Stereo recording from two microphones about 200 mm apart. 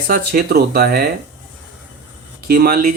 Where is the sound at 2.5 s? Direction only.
50° right (ahead or behind).